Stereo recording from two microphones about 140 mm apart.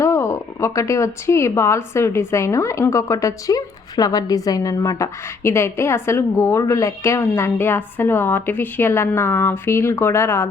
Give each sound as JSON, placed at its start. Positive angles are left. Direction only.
{"t": 0.0, "sound": "speech", "side_deg": 20}